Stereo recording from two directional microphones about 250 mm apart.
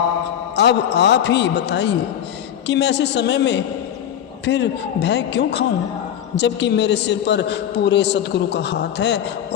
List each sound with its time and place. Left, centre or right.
0.5 s a man's voice: left